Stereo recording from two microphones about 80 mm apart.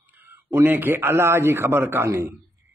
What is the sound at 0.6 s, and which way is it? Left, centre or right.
A man's voice, right.